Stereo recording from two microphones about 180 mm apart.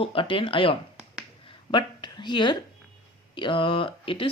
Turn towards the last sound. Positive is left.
turn(degrees=30)  # may be behind; listen again after turning